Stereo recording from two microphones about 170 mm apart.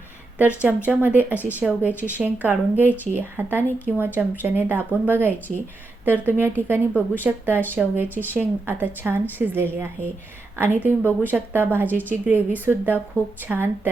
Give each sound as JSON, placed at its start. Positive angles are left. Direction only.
{"t": 0.3, "sound": "speech", "side_deg": -10}